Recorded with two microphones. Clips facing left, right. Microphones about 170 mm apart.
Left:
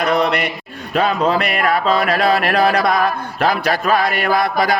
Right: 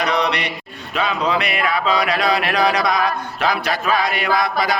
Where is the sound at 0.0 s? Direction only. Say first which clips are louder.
Left 3 dB; 50° left (ahead or behind).